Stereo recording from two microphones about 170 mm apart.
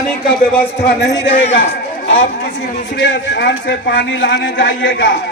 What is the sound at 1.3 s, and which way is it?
Speech, 50° left (ahead or behind).